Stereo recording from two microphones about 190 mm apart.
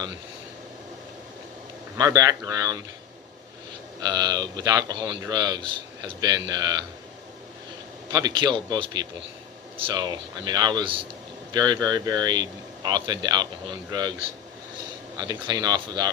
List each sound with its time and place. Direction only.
2.0 s speech: 20° right (ahead or behind)
4.0 s speech: 20° right (ahead or behind)
8.1 s speech: 25° right (ahead or behind)
15.2 s speech: 20° right (ahead or behind)